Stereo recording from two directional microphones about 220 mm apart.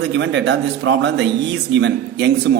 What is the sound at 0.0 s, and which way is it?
Speech, 55° right (ahead or behind).